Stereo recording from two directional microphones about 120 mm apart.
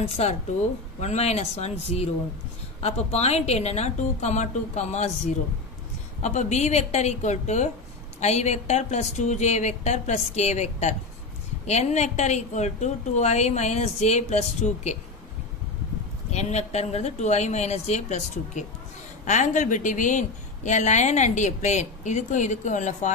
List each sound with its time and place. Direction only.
0.0 s a woman's voice: 60° left (ahead or behind)
6.2 s a woman's voice: 75° left (ahead or behind)
16.3 s a woman's voice: 65° left (ahead or behind); by 23.1 s 90° left